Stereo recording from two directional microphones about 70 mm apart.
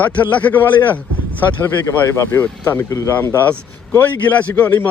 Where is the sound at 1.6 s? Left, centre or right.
Left.